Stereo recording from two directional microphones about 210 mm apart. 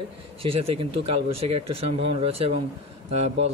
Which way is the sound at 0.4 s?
30° right (ahead or behind).